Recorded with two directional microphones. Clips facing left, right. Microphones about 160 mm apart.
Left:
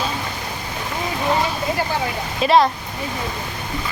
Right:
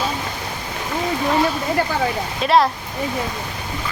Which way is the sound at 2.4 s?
Centre (ahead or behind).